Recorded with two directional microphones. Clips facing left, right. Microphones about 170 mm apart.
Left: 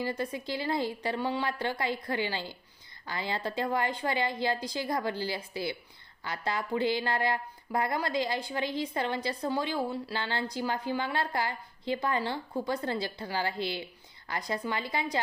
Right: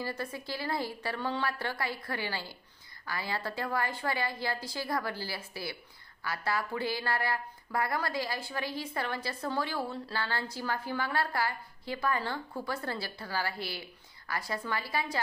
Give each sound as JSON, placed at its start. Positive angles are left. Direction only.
{"t": 0.0, "sound": "a woman's voice", "side_deg": 20}